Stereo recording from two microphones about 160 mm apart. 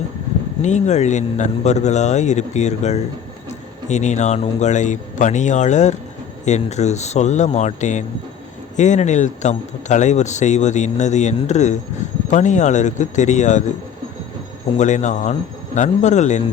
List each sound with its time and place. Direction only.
0.6 s speech: 45° left (ahead or behind)
14.8 s speech: 50° left (ahead or behind)